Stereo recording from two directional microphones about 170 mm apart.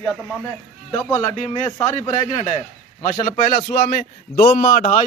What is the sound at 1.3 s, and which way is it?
Speech, 40° left (ahead or behind).